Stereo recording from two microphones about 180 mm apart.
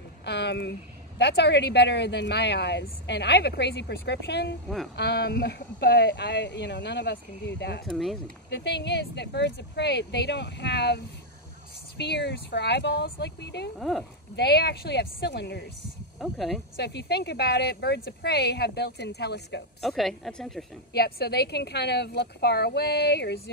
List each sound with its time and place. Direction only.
0.2 s speech: 70° left (ahead or behind)
7.8 s speech: centre (ahead or behind)
8.5 s speech: 75° left (ahead or behind)
12.0 s speech: 70° left (ahead or behind)
13.7 s speech: centre (ahead or behind)
14.3 s speech: 65° left (ahead or behind)
16.2 s speech: centre (ahead or behind)
16.7 s speech: 65° left (ahead or behind)
19.8 s speech: centre (ahead or behind)
20.9 s speech: 65° left (ahead or behind)